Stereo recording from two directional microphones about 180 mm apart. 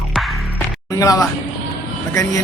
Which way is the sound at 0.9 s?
20° left (ahead or behind).